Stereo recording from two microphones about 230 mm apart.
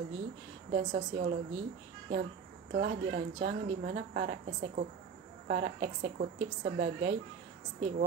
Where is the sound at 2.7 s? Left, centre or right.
Right.